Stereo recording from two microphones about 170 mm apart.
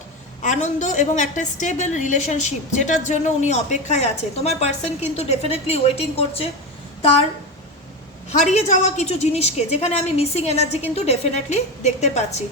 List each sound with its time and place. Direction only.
0.4 s a woman's voice: 45° left (ahead or behind)
8.3 s a woman's voice: 45° left (ahead or behind)